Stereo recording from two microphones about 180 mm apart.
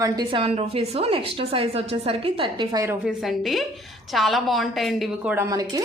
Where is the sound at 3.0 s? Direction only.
Centre (ahead or behind).